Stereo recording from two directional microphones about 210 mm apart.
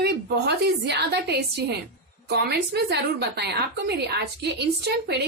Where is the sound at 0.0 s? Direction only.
50° right (ahead or behind).